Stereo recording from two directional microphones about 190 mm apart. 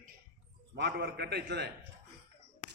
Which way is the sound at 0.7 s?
65° right (ahead or behind).